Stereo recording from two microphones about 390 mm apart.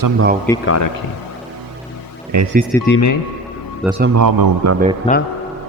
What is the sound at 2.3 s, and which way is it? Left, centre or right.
Speech, right.